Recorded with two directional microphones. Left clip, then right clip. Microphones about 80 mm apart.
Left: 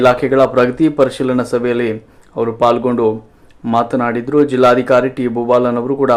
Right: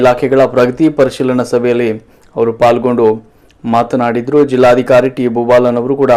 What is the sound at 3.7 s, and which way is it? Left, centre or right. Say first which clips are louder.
A man's voice: right 3 dB; right.